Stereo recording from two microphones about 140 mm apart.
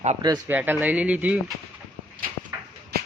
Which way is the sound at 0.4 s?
15° right (ahead or behind).